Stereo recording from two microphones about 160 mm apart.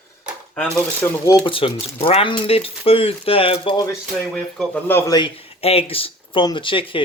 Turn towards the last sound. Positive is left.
turn(degrees=30)  # may be behind; listen again after turning